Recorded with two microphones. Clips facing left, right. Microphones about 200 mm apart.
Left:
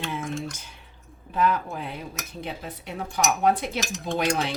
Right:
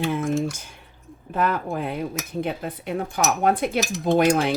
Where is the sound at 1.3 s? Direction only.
50° right (ahead or behind).